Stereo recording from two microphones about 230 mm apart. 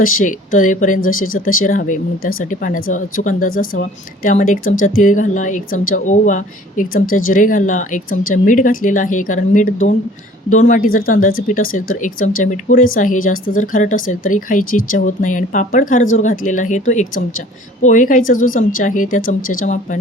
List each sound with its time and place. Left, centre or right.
0.0 s speech: left